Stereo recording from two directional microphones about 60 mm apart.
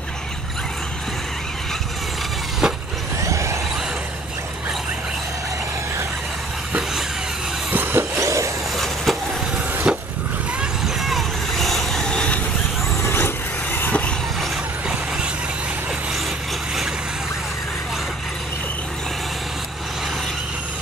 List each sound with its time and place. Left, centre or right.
2.6 s vehicle: centre
3.2 s vehicle: right
7.7 s vehicle: right
8.1 s vehicle: right
8.7 s vehicle: centre
9.9 s vehicle: centre
11.0 s vehicle: centre
13.0 s vehicle: left